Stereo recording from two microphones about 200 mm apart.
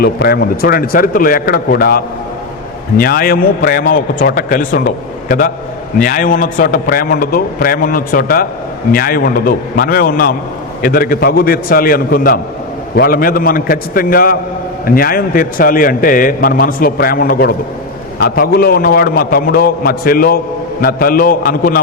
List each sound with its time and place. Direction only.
0.0 s a man's voice: 50° left (ahead or behind)
6.0 s a man's voice: 45° left (ahead or behind)